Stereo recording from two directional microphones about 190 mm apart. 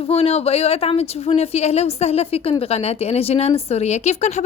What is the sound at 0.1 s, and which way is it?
A woman's voice, 35° left (ahead or behind).